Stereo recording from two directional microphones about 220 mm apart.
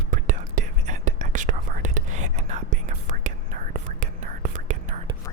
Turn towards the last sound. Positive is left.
turn(degrees=-35)  # may be behind; listen again after turning